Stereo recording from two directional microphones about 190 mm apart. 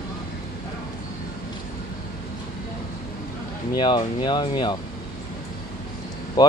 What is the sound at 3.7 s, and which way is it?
Speech, 25° left (ahead or behind).